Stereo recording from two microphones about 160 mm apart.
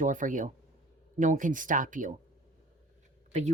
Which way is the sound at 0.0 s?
55° right (ahead or behind).